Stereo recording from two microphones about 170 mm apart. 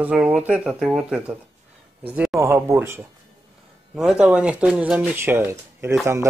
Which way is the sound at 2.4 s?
15° right (ahead or behind).